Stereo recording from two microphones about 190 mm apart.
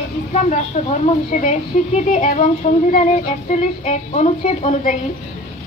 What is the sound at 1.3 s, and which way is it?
A woman's voice, 40° left (ahead or behind).